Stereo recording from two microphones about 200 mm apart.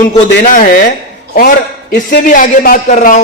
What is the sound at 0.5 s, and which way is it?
A man's voice, 45° left (ahead or behind).